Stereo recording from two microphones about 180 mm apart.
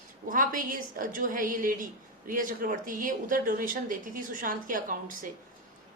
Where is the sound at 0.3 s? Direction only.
50° right (ahead or behind).